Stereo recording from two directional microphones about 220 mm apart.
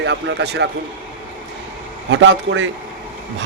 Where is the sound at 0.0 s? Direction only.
50° right (ahead or behind).